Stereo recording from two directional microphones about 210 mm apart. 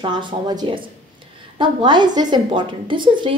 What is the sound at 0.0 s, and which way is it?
A woman's voice, 20° right (ahead or behind).